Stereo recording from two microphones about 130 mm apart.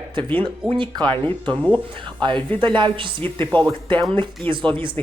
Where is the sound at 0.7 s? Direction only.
40° right (ahead or behind).